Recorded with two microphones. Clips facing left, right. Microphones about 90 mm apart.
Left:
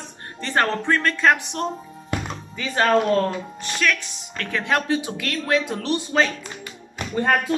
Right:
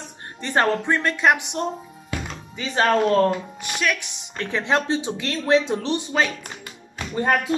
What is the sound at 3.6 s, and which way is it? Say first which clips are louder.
Speech: left 1 dB; 15° right (ahead or behind).